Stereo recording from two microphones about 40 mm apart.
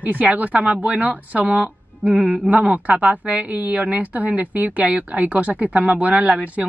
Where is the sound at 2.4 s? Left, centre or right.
Right.